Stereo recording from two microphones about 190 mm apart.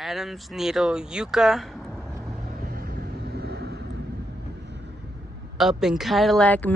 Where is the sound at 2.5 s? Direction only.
50° right (ahead or behind).